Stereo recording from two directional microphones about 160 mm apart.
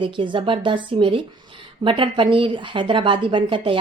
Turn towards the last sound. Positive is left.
turn(degrees=-30)  # may be behind; listen again after turning